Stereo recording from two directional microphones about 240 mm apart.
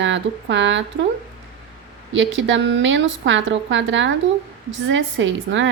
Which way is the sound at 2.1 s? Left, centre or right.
Right.